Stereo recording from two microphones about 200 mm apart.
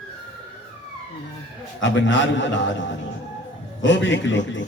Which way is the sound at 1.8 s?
65° left (ahead or behind).